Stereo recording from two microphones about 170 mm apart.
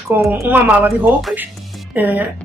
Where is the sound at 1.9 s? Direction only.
10° right (ahead or behind).